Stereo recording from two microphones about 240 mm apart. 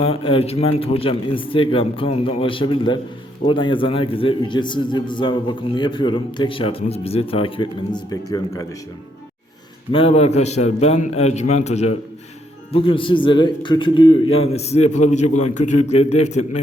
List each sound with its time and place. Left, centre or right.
0.0 s a man's voice: left
9.9 s a man's voice: left